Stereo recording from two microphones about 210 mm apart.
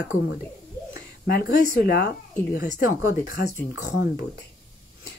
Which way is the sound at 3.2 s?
40° left (ahead or behind).